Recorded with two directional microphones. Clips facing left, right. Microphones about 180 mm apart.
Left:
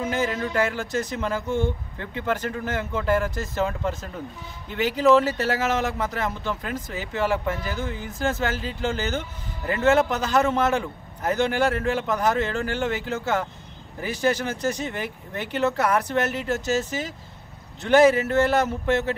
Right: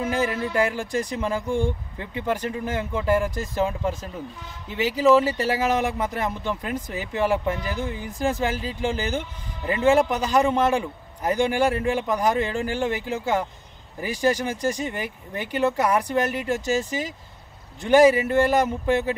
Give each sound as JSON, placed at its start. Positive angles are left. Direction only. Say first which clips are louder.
{"t": 0.0, "sound": "a man's voice", "louder": "right 1 dB", "side_deg": -10}